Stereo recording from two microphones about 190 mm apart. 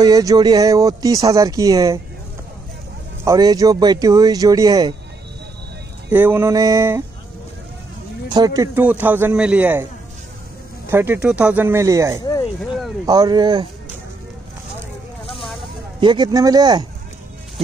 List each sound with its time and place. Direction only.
0.0 s speech: 20° right (ahead or behind)
3.3 s speech: 20° right (ahead or behind)
6.1 s speech: 10° right (ahead or behind)
8.3 s speech: 20° right (ahead or behind)
10.9 s speech: 10° right (ahead or behind)
12.2 s a sound: 20° left (ahead or behind)
13.0 s speech: 20° right (ahead or behind)
16.0 s speech: 25° right (ahead or behind)